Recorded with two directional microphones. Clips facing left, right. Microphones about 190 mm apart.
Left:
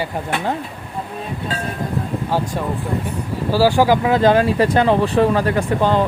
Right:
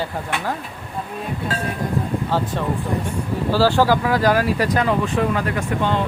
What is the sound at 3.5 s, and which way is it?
Speech, 10° left (ahead or behind).